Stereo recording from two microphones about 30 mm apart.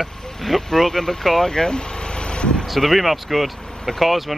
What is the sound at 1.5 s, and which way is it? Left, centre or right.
Vehicle, left.